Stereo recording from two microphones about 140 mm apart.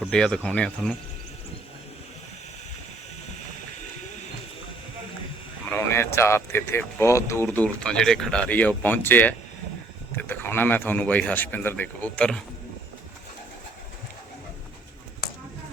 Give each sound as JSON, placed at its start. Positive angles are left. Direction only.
{"t": 0.1, "sound": "speech", "side_deg": 5}
{"t": 5.6, "sound": "speech", "side_deg": 15}